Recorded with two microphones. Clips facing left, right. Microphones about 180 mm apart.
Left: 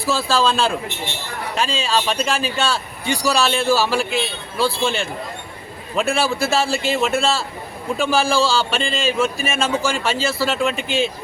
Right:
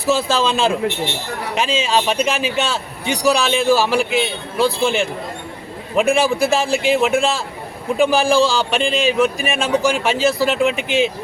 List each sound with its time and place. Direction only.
0.0 s a man's voice: 20° right (ahead or behind)